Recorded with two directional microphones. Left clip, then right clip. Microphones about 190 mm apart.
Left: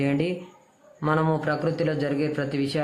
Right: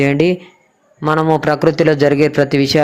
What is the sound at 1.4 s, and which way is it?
Speech, 40° right (ahead or behind).